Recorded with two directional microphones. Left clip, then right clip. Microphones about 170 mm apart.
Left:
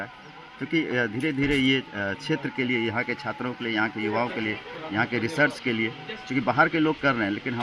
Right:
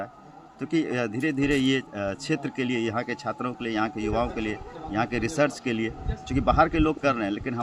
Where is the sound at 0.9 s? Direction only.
20° right (ahead or behind).